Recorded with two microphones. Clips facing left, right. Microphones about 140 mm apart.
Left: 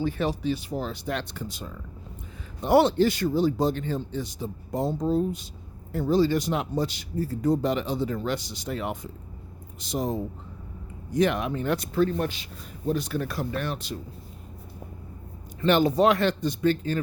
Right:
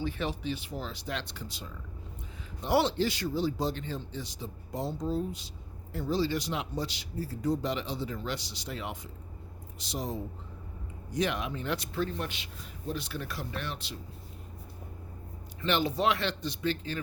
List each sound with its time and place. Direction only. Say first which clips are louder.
0.0 s speech: left 7 dB; 40° left (ahead or behind)
15.6 s speech: left 8 dB; 45° left (ahead or behind)